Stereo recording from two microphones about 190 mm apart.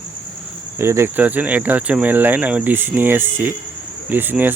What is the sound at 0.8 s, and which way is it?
Speech, 15° right (ahead or behind).